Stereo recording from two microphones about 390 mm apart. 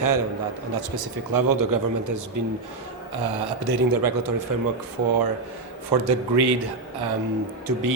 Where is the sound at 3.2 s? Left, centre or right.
Right.